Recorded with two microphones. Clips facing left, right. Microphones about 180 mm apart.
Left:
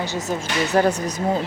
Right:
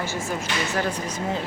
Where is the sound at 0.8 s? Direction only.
40° left (ahead or behind).